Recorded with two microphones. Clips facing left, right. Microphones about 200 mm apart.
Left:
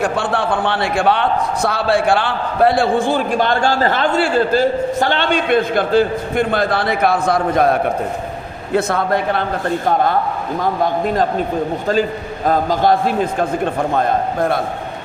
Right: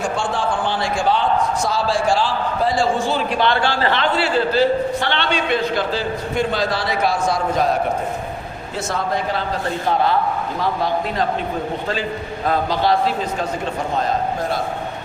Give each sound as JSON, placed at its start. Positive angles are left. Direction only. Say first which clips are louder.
{"t": 0.0, "sound": "a man's voice", "louder": "left 3 dB", "side_deg": 60}
{"t": 10.6, "sound": "a man's voice", "louder": "left 4 dB", "side_deg": 50}
{"t": 12.5, "sound": "a man's voice", "louder": "left 4 dB", "side_deg": 45}